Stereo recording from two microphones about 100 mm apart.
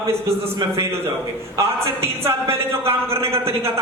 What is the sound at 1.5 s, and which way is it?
Speech, 25° right (ahead or behind).